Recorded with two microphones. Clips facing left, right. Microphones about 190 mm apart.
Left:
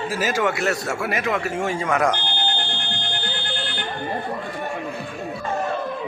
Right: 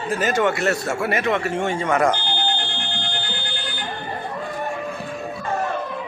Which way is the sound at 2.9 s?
55° left (ahead or behind).